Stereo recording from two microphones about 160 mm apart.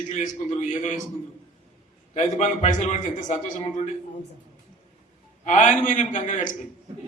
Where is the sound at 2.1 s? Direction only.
50° left (ahead or behind).